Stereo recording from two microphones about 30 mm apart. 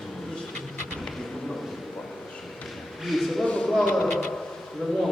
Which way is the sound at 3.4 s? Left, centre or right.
Left.